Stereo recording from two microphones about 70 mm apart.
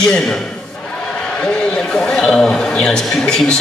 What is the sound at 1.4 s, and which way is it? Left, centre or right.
A man's voice, centre.